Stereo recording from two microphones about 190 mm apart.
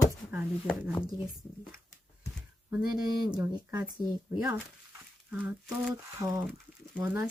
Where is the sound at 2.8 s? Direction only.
20° right (ahead or behind).